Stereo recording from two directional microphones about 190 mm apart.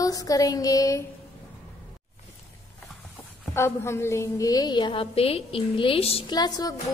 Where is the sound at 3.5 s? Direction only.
15° left (ahead or behind).